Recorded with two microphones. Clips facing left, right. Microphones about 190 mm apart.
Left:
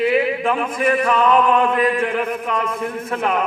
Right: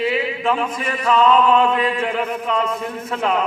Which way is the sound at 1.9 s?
50° left (ahead or behind).